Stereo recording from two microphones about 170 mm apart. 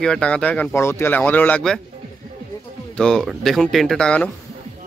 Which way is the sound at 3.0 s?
5° left (ahead or behind).